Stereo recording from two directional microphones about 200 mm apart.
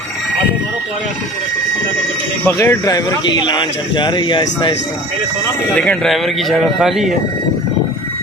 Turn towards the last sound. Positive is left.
turn(degrees=0)  # may be behind; listen again after turning